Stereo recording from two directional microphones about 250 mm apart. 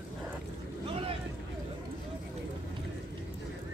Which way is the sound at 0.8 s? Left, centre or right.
Right.